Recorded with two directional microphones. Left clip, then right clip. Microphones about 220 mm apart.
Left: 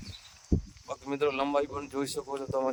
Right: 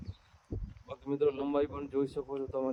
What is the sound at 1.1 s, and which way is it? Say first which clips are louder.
Speech: left 2 dB; 35° left (ahead or behind).